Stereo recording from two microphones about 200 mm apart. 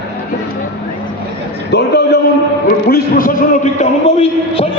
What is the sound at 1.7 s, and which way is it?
A man's voice, 55° left (ahead or behind).